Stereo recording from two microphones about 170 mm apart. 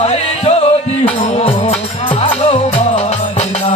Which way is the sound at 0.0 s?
40° left (ahead or behind).